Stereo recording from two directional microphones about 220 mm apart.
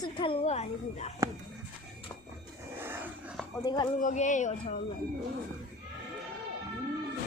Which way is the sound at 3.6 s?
20° left (ahead or behind).